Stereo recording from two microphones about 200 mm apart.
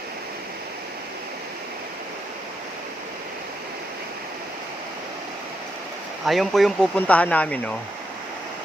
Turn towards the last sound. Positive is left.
turn(degrees=5)  # may be behind; listen again after turning